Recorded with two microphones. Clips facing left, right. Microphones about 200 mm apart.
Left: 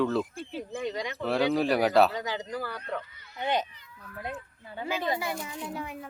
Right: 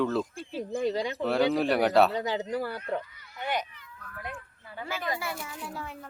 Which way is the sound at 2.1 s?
35° right (ahead or behind).